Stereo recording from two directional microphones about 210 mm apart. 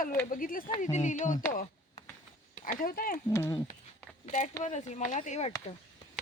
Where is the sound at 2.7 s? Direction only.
40° left (ahead or behind).